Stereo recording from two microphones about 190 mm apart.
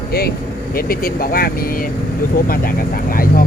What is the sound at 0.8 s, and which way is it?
Speech, 50° left (ahead or behind).